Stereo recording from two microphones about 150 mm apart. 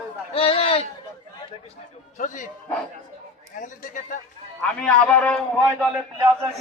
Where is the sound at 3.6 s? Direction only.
60° left (ahead or behind).